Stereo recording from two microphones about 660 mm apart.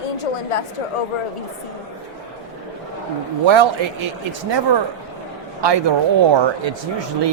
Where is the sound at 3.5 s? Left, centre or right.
Right.